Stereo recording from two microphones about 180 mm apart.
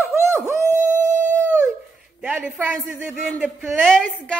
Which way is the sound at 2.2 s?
5° right (ahead or behind).